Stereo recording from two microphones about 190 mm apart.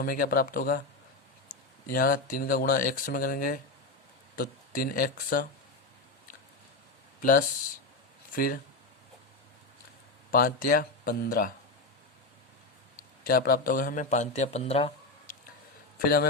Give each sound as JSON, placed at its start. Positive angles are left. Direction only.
{"t": 0.0, "sound": "speech", "side_deg": 50}
{"t": 1.9, "sound": "speech", "side_deg": 45}
{"t": 7.2, "sound": "speech", "side_deg": 45}
{"t": 10.3, "sound": "speech", "side_deg": 50}
{"t": 13.2, "sound": "a man's voice", "side_deg": 50}